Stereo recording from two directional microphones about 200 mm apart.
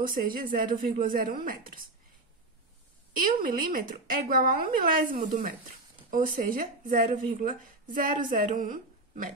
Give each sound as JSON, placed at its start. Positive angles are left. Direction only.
{"t": 0.0, "sound": "speech", "side_deg": -45}
{"t": 3.2, "sound": "speech", "side_deg": -45}